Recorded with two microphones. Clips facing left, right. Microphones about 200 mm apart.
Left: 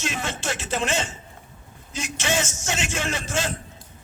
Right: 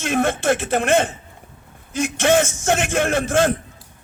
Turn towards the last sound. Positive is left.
turn(degrees=-55)  # may be behind; listen again after turning